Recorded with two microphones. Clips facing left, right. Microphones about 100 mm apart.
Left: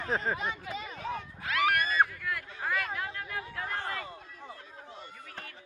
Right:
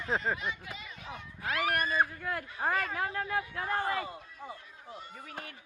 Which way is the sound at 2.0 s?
35° right (ahead or behind).